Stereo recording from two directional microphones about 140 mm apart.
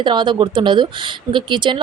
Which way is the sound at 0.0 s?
35° right (ahead or behind).